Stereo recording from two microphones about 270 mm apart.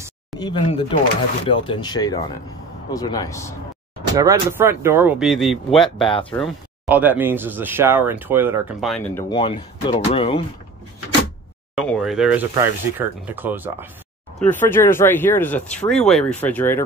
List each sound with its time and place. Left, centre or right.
0.4 s speech: centre
4.1 s speech: centre
9.3 s speech: centre
11.7 s speech: centre
14.4 s speech: centre